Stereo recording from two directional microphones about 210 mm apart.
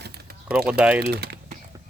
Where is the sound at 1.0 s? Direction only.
50° right (ahead or behind).